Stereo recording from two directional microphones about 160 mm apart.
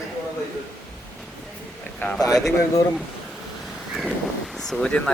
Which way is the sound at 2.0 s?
10° left (ahead or behind).